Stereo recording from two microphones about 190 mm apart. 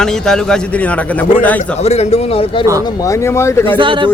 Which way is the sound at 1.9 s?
35° left (ahead or behind).